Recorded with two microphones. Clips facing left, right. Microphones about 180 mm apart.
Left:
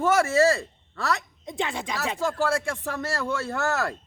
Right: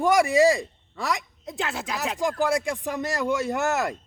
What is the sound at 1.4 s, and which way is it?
Speech, centre (ahead or behind).